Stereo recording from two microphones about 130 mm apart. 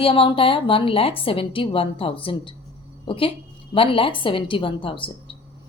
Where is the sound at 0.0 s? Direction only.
45° left (ahead or behind).